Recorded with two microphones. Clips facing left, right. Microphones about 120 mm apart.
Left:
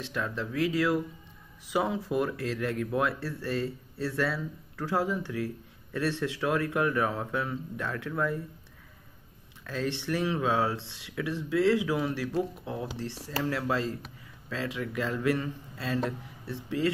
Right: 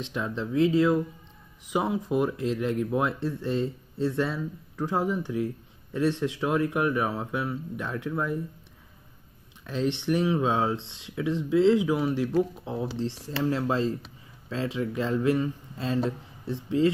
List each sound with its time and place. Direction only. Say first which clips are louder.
0.0 s speech: right 2 dB; 20° right (ahead or behind)
9.7 s speech: right 5 dB; 20° right (ahead or behind)